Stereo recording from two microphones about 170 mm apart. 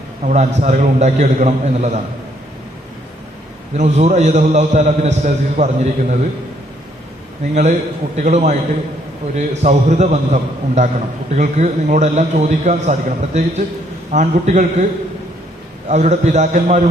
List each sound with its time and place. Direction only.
0.3 s a man's voice: 45° right (ahead or behind)
3.8 s a man's voice: 40° right (ahead or behind)
7.5 s a man's voice: 45° right (ahead or behind)
15.9 s a man's voice: 40° right (ahead or behind)